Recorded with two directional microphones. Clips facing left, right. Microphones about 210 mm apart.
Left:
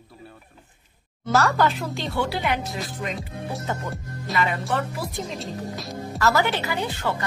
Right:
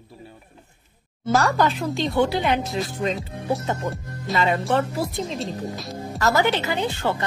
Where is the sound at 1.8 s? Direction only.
20° right (ahead or behind).